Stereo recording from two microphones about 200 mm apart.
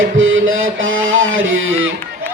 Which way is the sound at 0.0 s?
75° right (ahead or behind).